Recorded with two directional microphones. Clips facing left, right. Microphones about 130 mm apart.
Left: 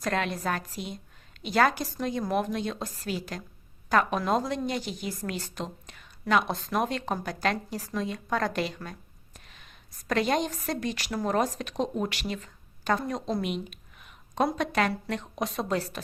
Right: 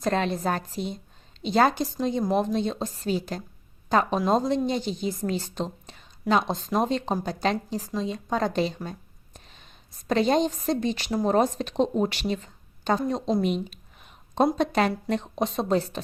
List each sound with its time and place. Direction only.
0.0 s a woman's voice: 30° right (ahead or behind)